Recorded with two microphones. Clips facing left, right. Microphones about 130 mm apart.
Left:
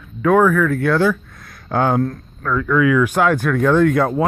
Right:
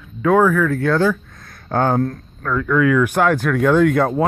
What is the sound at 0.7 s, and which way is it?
Speech, 35° right (ahead or behind).